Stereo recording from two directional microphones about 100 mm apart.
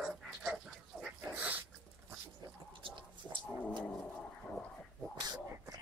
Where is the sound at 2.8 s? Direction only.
55° right (ahead or behind).